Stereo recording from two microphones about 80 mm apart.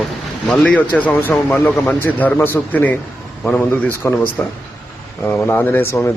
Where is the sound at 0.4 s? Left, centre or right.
Centre.